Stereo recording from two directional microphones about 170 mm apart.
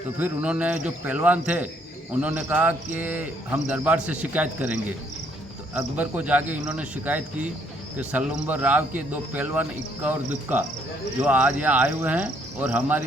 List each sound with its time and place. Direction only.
0.2 s speech: 10° right (ahead or behind)